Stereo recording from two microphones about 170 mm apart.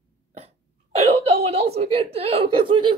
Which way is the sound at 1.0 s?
40° right (ahead or behind).